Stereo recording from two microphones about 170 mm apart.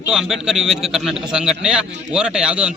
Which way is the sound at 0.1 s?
5° right (ahead or behind).